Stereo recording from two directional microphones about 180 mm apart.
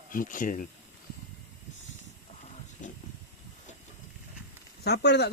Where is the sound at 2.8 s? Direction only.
45° left (ahead or behind).